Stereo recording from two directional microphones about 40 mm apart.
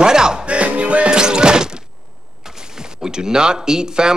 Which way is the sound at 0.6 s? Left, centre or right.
Right.